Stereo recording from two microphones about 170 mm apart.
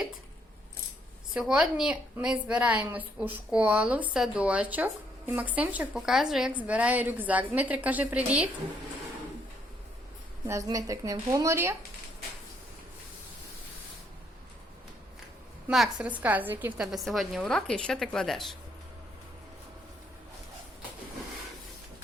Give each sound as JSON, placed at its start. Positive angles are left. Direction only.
{"t": 1.3, "sound": "a woman's voice", "side_deg": -5}
{"t": 10.4, "sound": "a woman's voice", "side_deg": -20}
{"t": 15.6, "sound": "a woman's voice", "side_deg": -5}